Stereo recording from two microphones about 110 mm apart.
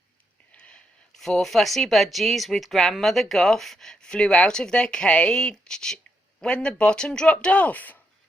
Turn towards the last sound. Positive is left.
turn(degrees=15)  # may be behind; listen again after turning